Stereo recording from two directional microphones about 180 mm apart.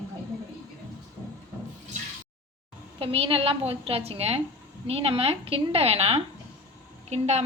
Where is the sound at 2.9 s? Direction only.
30° right (ahead or behind).